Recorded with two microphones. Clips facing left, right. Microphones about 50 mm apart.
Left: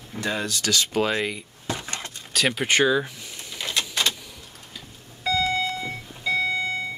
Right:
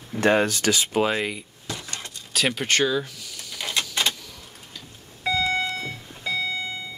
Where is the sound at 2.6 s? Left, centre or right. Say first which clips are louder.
Left 5 dB; centre.